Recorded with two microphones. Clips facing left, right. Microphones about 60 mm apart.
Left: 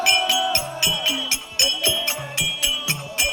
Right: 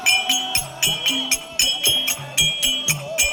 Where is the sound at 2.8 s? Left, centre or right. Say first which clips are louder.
Right 2 dB; centre.